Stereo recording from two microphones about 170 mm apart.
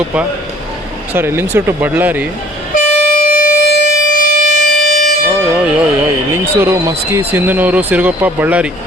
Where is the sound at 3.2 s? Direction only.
60° left (ahead or behind).